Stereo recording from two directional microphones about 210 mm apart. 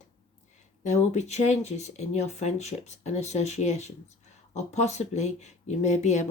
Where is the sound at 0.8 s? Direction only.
35° left (ahead or behind).